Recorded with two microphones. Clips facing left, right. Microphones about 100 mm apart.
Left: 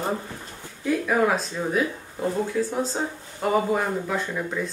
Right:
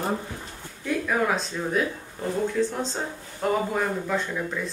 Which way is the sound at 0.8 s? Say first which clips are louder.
Left 3 dB; 5° left (ahead or behind).